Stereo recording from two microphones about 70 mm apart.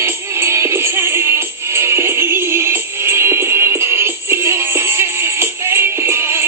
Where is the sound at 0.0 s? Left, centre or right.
Right.